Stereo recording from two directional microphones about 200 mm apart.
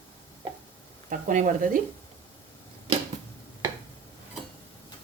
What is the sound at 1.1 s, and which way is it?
Speech, 40° right (ahead or behind).